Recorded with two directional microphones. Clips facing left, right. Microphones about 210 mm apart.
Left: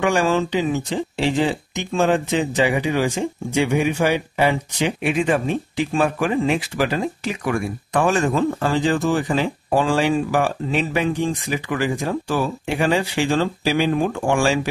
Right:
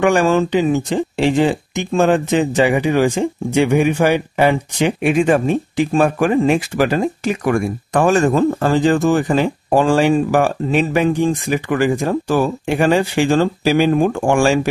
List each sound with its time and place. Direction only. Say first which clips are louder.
0.0 s speech: right 5 dB; 50° right (ahead or behind)